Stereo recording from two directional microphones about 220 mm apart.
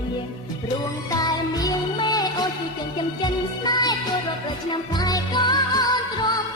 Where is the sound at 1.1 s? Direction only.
15° left (ahead or behind).